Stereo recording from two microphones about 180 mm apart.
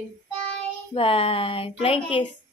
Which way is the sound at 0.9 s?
30° left (ahead or behind).